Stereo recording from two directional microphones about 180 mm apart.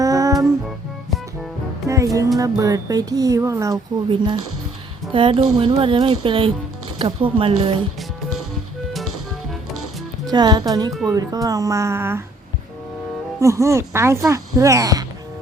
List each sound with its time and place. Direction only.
0.0 s music: 20° right (ahead or behind)
1.9 s music: 15° right (ahead or behind)
2.4 s speech: 20° right (ahead or behind)
10.2 s speech: 20° right (ahead or behind)
13.4 s speech: 15° right (ahead or behind)